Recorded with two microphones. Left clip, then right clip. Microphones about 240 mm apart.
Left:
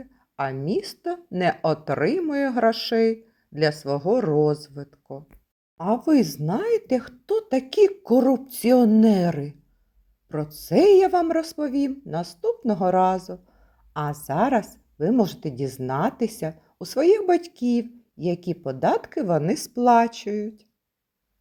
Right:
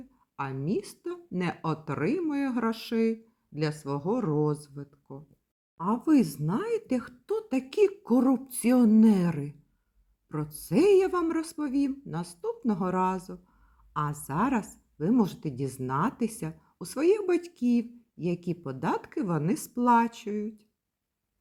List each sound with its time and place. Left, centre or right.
0.3 s speech: centre
4.7 s speech: left
6.1 s a woman's voice: centre